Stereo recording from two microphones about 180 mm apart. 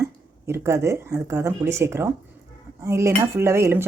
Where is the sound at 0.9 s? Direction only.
15° right (ahead or behind).